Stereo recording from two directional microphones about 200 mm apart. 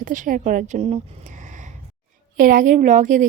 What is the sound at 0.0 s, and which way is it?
A woman's voice, 40° right (ahead or behind).